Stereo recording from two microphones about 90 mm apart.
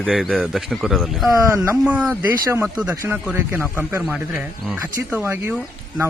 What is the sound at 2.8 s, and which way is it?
Speech, 30° right (ahead or behind).